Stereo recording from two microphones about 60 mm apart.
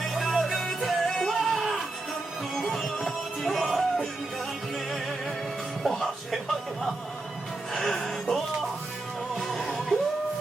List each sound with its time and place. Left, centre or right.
0.1 s music: centre
7.7 s music: centre